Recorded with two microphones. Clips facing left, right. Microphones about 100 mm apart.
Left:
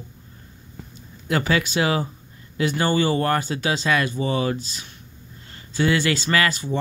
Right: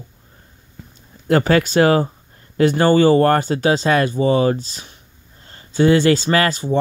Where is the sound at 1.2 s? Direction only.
45° right (ahead or behind).